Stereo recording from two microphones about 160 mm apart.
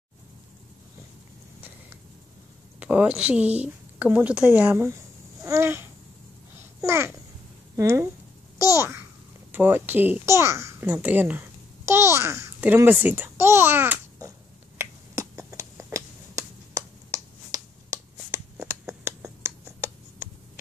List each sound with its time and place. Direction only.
2.8 s a woman's voice: 10° right (ahead or behind)
5.4 s babbling: 15° right (ahead or behind)
6.8 s a child's voice: 15° right (ahead or behind)
14.8 s finger snapping: 20° right (ahead or behind)